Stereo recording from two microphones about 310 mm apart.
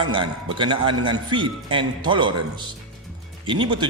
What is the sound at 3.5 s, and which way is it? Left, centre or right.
Speech, centre.